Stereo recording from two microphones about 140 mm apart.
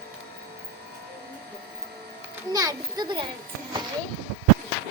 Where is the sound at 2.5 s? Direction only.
25° right (ahead or behind).